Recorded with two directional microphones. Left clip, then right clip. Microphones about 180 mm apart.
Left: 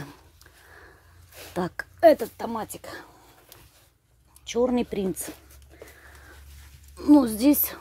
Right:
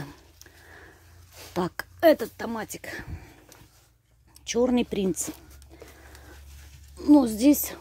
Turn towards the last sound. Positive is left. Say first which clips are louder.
# even
turn(degrees=-5)  # may be behind; listen again after turning